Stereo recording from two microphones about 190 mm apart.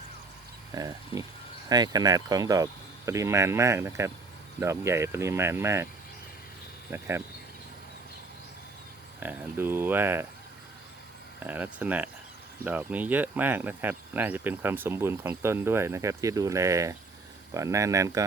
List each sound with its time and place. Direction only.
0.7 s speech: 20° right (ahead or behind)
3.1 s cricket: 15° right (ahead or behind)
6.9 s cricket: 15° right (ahead or behind)
9.2 s cricket: 10° right (ahead or behind)
11.3 s cricket: 10° right (ahead or behind)